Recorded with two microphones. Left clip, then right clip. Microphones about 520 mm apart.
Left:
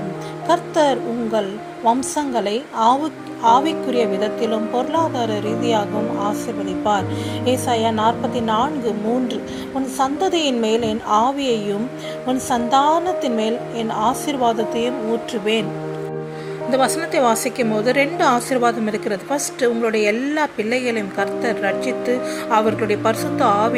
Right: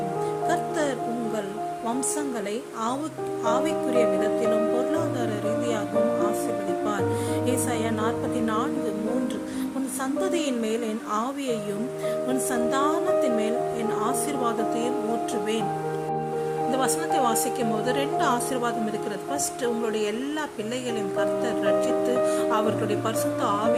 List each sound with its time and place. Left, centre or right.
0.4 s music: right
2.1 s a woman's voice: right
7.4 s a woman's voice: right
10.0 s a woman's voice: right
16.7 s a woman's voice: right
22.5 s a woman's voice: right